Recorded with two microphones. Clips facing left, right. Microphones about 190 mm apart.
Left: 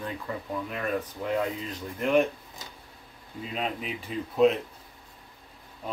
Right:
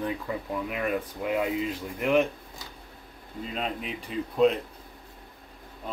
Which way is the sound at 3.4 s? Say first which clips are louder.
Even; centre (ahead or behind).